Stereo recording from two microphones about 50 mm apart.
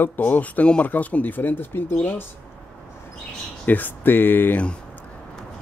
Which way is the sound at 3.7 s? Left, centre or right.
Left.